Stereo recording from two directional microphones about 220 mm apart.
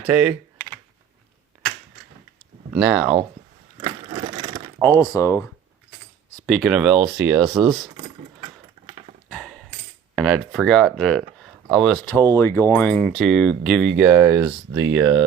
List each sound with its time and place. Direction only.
0.1 s speech: 5° right (ahead or behind)
2.7 s speech: centre (ahead or behind)
4.1 s a sound: 20° right (ahead or behind)
4.8 s speech: 15° left (ahead or behind)
6.4 s speech: centre (ahead or behind)
9.3 s dog: centre (ahead or behind)
10.2 s speech: centre (ahead or behind)